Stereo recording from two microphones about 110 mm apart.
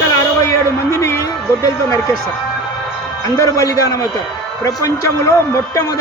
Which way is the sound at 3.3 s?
30° left (ahead or behind).